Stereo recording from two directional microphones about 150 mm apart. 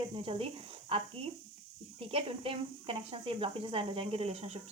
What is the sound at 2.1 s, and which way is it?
A child's voice, 40° right (ahead or behind).